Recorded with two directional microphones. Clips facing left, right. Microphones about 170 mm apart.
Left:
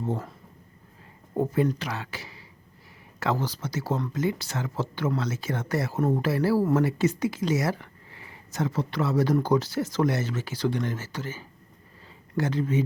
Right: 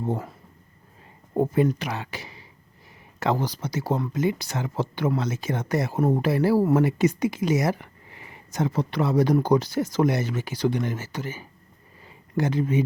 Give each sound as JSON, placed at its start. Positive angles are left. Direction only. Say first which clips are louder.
{"t": 0.0, "sound": "speech", "louder": "right 2 dB", "side_deg": -10}